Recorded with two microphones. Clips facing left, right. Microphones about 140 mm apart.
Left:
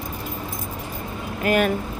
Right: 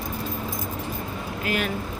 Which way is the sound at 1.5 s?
50° left (ahead or behind).